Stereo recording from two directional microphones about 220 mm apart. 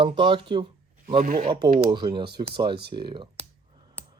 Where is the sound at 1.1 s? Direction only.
40° right (ahead or behind).